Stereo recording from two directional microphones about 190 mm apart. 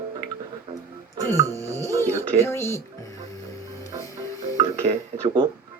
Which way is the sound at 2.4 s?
15° left (ahead or behind).